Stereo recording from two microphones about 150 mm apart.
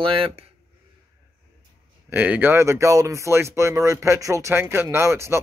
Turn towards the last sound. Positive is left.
turn(degrees=-20)  # may be behind; listen again after turning